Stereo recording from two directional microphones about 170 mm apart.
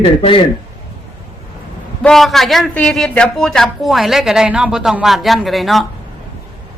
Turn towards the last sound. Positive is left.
turn(degrees=0)  # may be behind; listen again after turning